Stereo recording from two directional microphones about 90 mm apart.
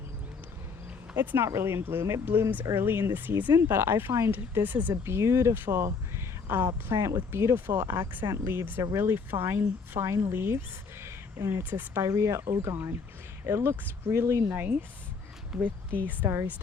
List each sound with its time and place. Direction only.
1.1 s speech: 20° right (ahead or behind)
5.0 s speech: 30° right (ahead or behind)
11.0 s a sound: 30° right (ahead or behind)
11.7 s speech: 20° right (ahead or behind)
12.0 s speech: 30° right (ahead or behind)
14.5 s speech: 20° right (ahead or behind)
15.5 s speech: 5° right (ahead or behind)
16.0 s speech: 25° right (ahead or behind)